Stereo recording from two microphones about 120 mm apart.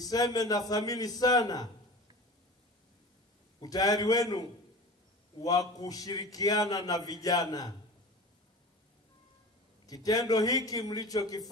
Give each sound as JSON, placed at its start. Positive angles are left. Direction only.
{"t": 0.0, "sound": "a man's voice", "side_deg": 30}
{"t": 3.6, "sound": "a man's voice", "side_deg": 30}
{"t": 9.8, "sound": "a man's voice", "side_deg": 30}